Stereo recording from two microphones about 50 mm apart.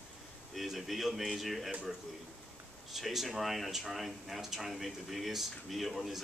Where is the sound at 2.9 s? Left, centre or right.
Centre.